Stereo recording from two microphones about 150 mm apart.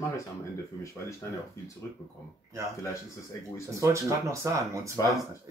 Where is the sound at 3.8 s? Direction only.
20° right (ahead or behind).